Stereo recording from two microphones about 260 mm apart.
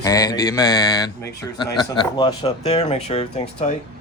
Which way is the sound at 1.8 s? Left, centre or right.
Centre.